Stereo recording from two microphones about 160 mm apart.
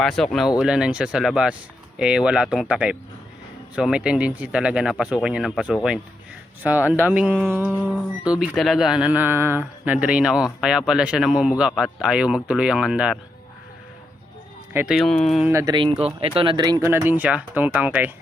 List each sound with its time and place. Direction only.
0.0 s speech: 5° left (ahead or behind)
14.7 s speech: 10° right (ahead or behind)
14.9 s speech: 5° left (ahead or behind)
15.4 s speech: 20° right (ahead or behind)
15.7 s speech: 30° right (ahead or behind)
16.9 s speech: 15° right (ahead or behind)